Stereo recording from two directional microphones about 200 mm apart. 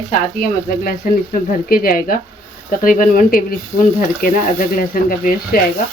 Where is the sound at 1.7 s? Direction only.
45° left (ahead or behind).